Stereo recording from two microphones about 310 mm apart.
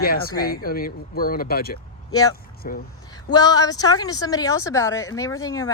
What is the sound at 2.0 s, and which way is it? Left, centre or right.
Speech, centre.